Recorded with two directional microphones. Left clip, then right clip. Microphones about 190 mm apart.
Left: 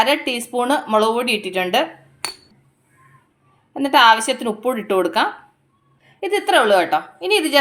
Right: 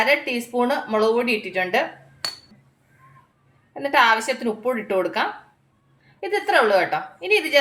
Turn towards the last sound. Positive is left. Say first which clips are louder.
# left 2 dB
turn(degrees=40)  # may be behind; listen again after turning